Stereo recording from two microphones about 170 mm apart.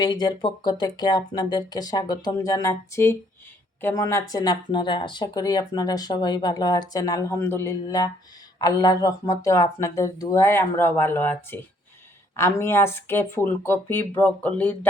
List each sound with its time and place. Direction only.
0.0 s speech: 25° left (ahead or behind); by 14.8 s 10° left (ahead or behind)